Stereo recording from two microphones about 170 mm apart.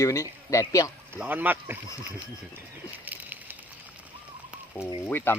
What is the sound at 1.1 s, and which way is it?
Speech, 10° right (ahead or behind).